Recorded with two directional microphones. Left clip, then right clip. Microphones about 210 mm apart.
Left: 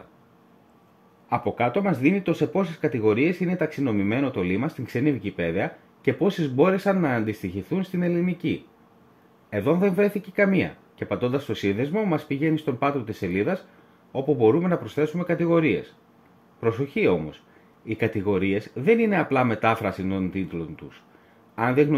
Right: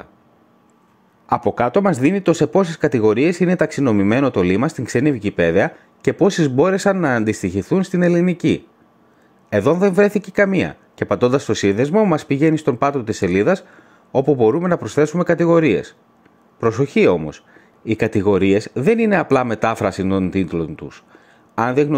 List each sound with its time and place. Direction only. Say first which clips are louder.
1.3 s speech: right 7 dB; 25° right (ahead or behind)